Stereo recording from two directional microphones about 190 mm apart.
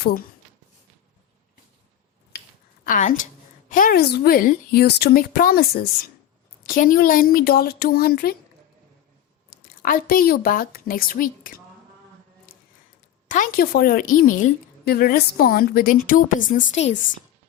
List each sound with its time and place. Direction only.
0.0 s a woman's voice: 50° left (ahead or behind)
2.3 s a sound: 60° left (ahead or behind)
2.8 s a woman's voice: 45° left (ahead or behind)
9.8 s a woman's voice: 50° left (ahead or behind)
13.2 s a woman's voice: 45° left (ahead or behind)